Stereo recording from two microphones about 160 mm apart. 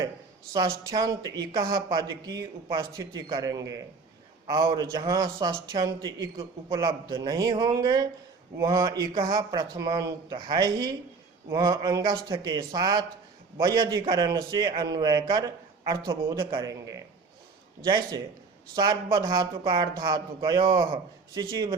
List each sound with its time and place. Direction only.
0.9 s a man's voice: 25° right (ahead or behind)